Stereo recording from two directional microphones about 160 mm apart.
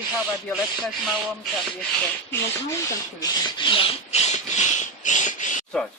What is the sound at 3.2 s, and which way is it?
Speech, 30° left (ahead or behind).